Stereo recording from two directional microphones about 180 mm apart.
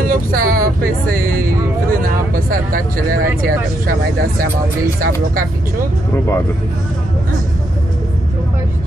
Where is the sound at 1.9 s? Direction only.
50° right (ahead or behind).